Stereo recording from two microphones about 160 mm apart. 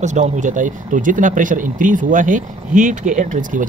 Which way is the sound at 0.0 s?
50° right (ahead or behind).